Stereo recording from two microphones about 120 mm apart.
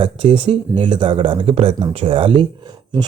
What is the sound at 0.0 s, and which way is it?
Speech, 50° right (ahead or behind).